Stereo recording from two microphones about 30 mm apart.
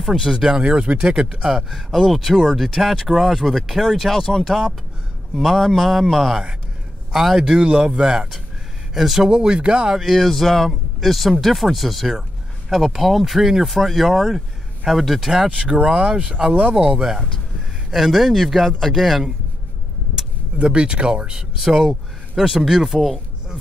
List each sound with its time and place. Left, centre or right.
0.0 s speech: centre
0.4 s speech: right
1.5 s speech: centre
4.2 s a man's voice: centre
7.3 s speech: right
8.9 s a man's voice: centre
9.2 s speech: right
9.9 s speech: centre
15.8 s speech: right
17.0 s speech: centre
17.9 s speech: centre
20.5 s speech: right
22.3 s speech: centre